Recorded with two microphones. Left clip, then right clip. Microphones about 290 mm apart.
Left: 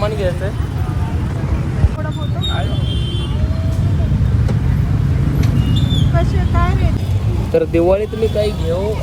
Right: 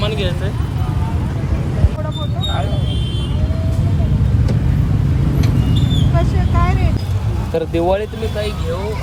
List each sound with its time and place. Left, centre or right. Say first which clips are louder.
0.0 s vehicle: left 2 dB; centre
6.1 s vehicle: even; right
7.5 s speech: left 3 dB; centre
8.4 s speech: left 5 dB; centre